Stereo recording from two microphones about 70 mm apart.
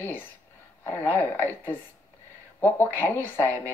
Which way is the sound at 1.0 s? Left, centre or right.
Left.